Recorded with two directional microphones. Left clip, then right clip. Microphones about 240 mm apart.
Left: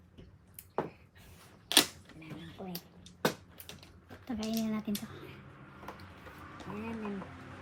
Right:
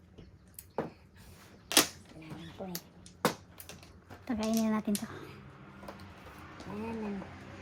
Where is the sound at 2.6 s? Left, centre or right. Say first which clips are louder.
Right 3 dB; centre.